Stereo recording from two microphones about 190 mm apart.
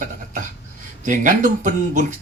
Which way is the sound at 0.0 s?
45° right (ahead or behind).